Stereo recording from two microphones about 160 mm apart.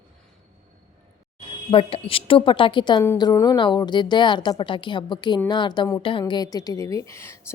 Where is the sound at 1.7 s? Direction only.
35° left (ahead or behind).